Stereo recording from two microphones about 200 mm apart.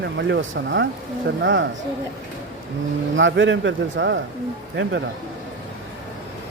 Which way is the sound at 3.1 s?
70° right (ahead or behind).